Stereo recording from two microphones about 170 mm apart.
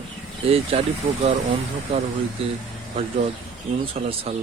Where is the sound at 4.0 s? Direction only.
45° right (ahead or behind).